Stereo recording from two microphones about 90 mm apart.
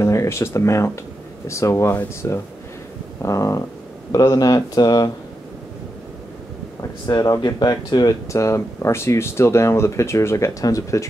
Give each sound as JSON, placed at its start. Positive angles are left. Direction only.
{"t": 0.0, "sound": "speech", "side_deg": 30}
{"t": 7.1, "sound": "speech", "side_deg": 50}
{"t": 8.3, "sound": "speech", "side_deg": 35}